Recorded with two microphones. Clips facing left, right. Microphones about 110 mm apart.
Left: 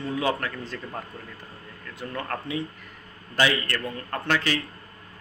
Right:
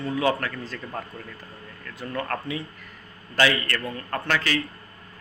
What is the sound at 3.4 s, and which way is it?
Speech, 15° left (ahead or behind).